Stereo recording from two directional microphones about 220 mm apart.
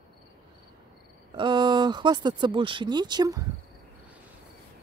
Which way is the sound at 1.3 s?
20° right (ahead or behind).